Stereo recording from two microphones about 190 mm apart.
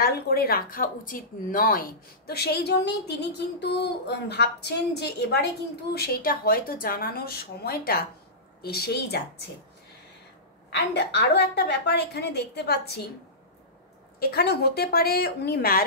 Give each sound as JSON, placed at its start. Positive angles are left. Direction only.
{"t": 0.0, "sound": "a woman's voice", "side_deg": 55}
{"t": 10.9, "sound": "speech", "side_deg": 65}
{"t": 14.2, "sound": "speech", "side_deg": 55}